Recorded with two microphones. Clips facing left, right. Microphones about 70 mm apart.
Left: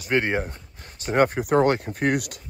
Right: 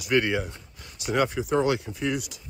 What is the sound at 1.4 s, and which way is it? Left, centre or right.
Speech, left.